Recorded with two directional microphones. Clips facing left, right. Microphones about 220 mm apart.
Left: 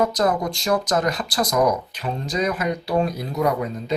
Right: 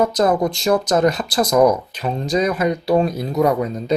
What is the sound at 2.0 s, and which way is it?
Speech, 35° right (ahead or behind).